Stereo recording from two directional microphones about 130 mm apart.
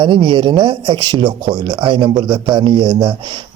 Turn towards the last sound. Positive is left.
turn(degrees=-45)  # may be behind; listen again after turning